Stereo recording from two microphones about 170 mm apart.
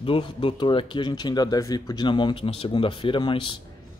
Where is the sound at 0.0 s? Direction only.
30° left (ahead or behind).